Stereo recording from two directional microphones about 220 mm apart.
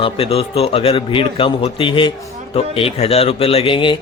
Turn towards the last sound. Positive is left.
turn(degrees=20)  # may be behind; listen again after turning